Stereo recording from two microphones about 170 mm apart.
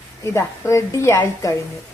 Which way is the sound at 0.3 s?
15° left (ahead or behind).